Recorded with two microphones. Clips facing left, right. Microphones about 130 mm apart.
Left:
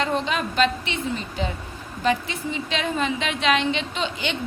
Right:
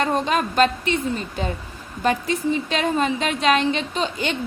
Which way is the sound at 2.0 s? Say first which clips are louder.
Right 3 dB; 45° right (ahead or behind).